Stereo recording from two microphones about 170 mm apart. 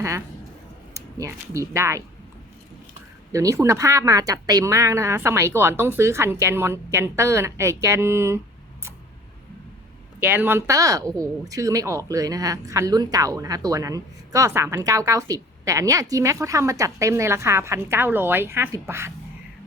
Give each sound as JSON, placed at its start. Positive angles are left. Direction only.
{"t": 0.9, "sound": "speech", "side_deg": -20}
{"t": 3.3, "sound": "speech", "side_deg": -15}
{"t": 10.2, "sound": "a woman's voice", "side_deg": -10}